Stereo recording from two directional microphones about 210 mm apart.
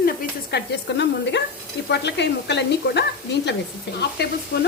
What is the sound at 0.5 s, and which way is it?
A woman's voice, 55° left (ahead or behind).